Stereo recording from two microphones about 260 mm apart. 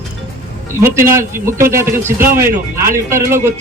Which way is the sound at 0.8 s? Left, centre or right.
Centre.